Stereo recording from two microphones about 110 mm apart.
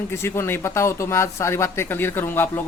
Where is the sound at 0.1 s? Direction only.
25° left (ahead or behind).